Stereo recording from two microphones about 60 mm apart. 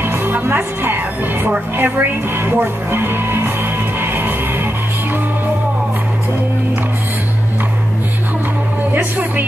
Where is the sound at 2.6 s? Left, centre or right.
Right.